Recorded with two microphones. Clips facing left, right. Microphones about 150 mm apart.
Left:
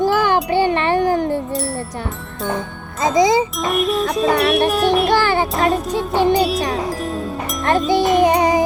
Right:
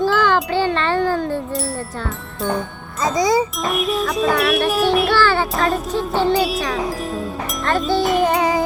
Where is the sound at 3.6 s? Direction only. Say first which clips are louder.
Left 2 dB; centre (ahead or behind).